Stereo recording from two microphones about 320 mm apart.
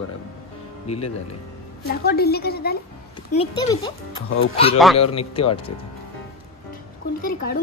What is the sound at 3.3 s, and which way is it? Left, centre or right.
Speech, centre.